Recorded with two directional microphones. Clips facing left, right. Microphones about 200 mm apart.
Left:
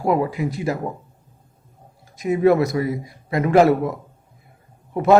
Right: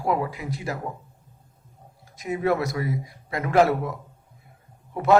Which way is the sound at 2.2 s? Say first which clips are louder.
Left 8 dB; 20° left (ahead or behind).